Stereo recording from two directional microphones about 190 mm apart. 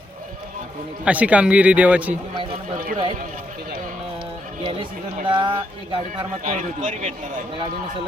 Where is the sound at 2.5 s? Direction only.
50° right (ahead or behind).